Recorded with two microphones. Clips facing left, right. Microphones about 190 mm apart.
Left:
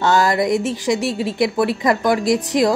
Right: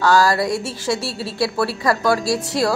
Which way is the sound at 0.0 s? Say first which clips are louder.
Even; 20° left (ahead or behind).